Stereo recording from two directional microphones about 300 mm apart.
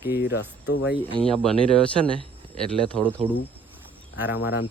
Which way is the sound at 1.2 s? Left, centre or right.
Centre.